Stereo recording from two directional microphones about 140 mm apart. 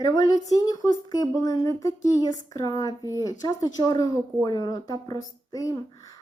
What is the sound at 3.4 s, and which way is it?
A woman's voice, 25° left (ahead or behind).